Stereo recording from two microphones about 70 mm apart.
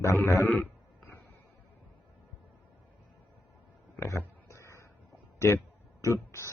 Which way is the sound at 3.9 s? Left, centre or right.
Left.